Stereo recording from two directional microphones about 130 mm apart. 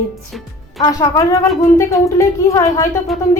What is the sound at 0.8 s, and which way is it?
A woman's voice, 25° left (ahead or behind).